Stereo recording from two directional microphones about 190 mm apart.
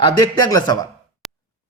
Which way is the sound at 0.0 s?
20° left (ahead or behind).